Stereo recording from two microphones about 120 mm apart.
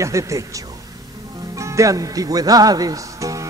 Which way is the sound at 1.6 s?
25° right (ahead or behind).